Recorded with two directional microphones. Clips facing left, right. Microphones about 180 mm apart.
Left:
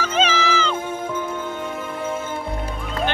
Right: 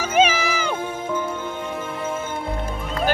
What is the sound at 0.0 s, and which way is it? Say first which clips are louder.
Music: right 2 dB; 10° right (ahead or behind).